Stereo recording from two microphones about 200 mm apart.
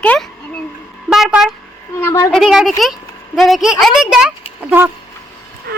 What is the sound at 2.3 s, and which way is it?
Speech, centre (ahead or behind).